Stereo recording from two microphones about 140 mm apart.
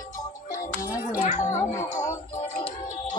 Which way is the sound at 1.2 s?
60° left (ahead or behind).